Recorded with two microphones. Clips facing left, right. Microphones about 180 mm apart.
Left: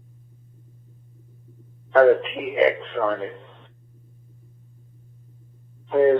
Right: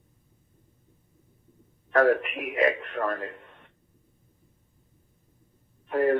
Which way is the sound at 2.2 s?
90° left.